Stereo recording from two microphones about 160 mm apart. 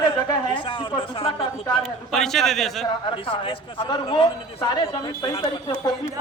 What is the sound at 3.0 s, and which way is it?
A man's voice, 30° left (ahead or behind).